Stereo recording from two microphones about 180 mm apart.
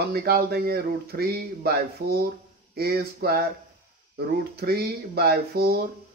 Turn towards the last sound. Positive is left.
turn(degrees=-60)  # may be behind; listen again after turning